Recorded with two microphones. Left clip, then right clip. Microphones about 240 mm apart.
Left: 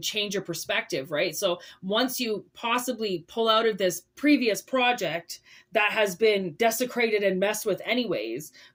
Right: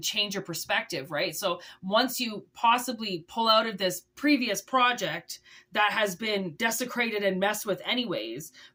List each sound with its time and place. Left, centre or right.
0.0 s speech: centre